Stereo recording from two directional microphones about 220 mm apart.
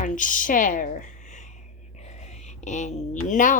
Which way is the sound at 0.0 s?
35° left (ahead or behind).